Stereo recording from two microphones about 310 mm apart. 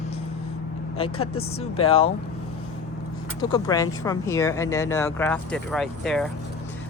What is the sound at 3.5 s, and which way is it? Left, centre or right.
Speech, centre.